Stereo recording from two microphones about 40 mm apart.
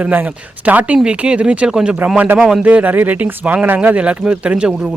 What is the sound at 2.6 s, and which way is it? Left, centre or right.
Speech, right.